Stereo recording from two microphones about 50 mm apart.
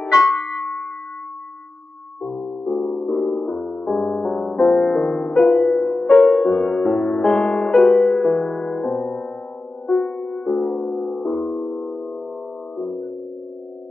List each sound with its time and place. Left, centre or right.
0.1 s music: centre
2.2 s music: centre